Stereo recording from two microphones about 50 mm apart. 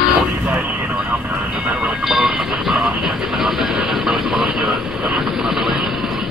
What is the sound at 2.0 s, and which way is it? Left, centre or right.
Train, centre.